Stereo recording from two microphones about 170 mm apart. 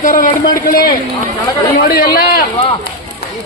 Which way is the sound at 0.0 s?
55° left (ahead or behind).